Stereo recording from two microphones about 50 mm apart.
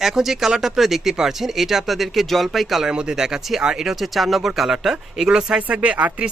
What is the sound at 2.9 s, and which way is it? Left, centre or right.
Speech, centre.